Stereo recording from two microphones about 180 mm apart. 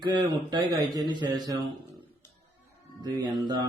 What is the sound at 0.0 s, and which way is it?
A man's voice, 25° right (ahead or behind).